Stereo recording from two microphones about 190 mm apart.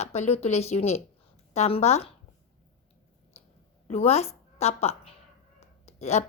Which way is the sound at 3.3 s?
35° left (ahead or behind).